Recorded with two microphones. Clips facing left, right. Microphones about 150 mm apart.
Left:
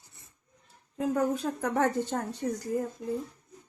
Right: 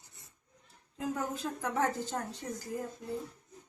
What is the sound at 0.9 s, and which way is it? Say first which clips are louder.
A woman's voice: left 8 dB; 65° left (ahead or behind).